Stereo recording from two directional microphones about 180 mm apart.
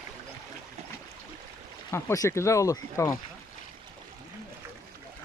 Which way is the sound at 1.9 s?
15° left (ahead or behind).